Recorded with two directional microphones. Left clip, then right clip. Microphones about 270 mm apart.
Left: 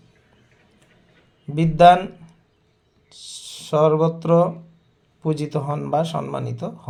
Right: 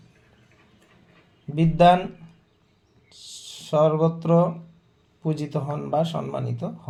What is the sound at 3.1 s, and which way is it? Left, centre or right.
Speech, left.